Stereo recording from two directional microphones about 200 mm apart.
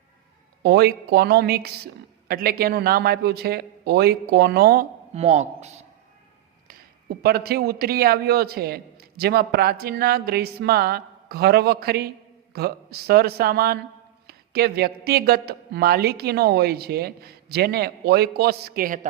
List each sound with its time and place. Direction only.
0.6 s a man's voice: 55° right (ahead or behind)
5.1 s speech: 30° right (ahead or behind)
6.7 s a man's voice: 50° right (ahead or behind)